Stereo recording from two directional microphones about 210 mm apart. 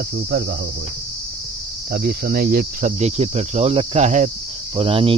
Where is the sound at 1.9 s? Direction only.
50° right (ahead or behind); by 5.2 s 25° right (ahead or behind).